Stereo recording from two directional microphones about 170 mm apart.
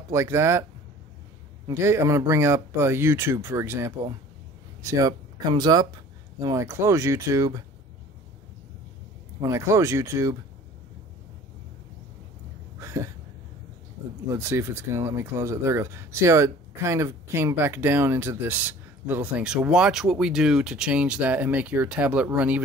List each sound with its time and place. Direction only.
0.1 s speech: 15° right (ahead or behind)
1.7 s speech: 15° right (ahead or behind)
9.4 s speech: 15° right (ahead or behind)
12.7 s a sound: 15° right (ahead or behind)
14.3 s speech: 15° right (ahead or behind)